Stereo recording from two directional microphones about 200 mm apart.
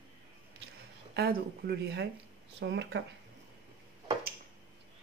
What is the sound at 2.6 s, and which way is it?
Speech, 65° right (ahead or behind).